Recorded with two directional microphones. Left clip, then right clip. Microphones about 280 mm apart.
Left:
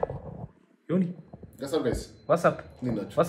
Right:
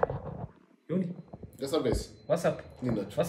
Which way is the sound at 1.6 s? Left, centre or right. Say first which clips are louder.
Left 1 dB; centre.